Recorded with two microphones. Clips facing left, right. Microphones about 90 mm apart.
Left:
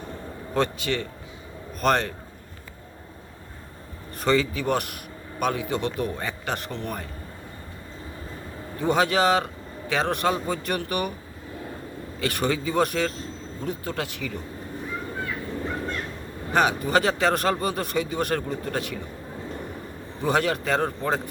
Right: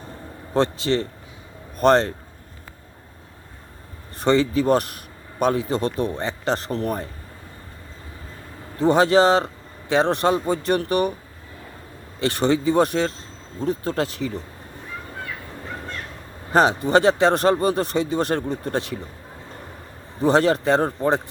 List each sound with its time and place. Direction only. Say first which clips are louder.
0.5 s speech: right 5 dB; 25° right (ahead or behind)
4.2 s speech: right 4 dB; 25° right (ahead or behind)
8.8 s speech: right 6 dB; 25° right (ahead or behind)
12.2 s speech: right 6 dB; 25° right (ahead or behind)
16.5 s speech: right 4 dB; 30° right (ahead or behind)
20.2 s speech: right 6 dB; 30° right (ahead or behind)